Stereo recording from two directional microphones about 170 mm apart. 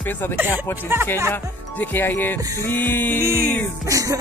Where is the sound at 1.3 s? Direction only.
10° left (ahead or behind).